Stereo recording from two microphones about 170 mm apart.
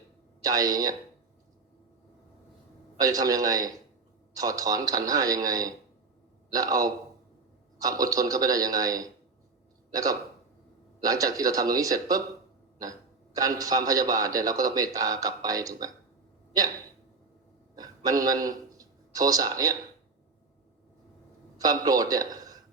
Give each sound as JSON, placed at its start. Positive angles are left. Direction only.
{"t": 0.4, "sound": "a man's voice", "side_deg": -20}
{"t": 3.0, "sound": "a man's voice", "side_deg": -20}
{"t": 17.7, "sound": "a man's voice", "side_deg": -20}
{"t": 21.6, "sound": "a man's voice", "side_deg": -20}